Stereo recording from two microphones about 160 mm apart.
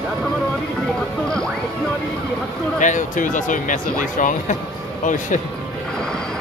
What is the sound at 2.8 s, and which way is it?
Speech, 55° left (ahead or behind).